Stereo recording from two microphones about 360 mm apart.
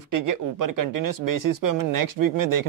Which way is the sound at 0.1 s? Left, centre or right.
Right.